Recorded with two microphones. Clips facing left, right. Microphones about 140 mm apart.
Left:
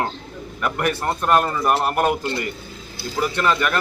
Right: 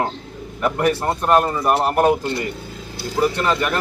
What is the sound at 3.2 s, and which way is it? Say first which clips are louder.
Speech: right 2 dB; 30° right (ahead or behind).